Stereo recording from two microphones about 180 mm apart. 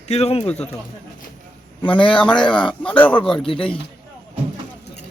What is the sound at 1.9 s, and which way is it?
Speech, 30° left (ahead or behind).